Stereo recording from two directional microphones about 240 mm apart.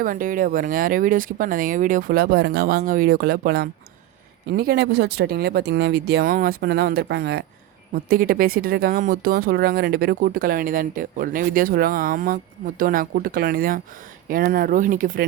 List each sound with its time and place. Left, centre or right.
0.0 s speech: right